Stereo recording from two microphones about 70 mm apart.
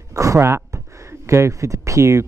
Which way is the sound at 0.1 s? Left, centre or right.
Right.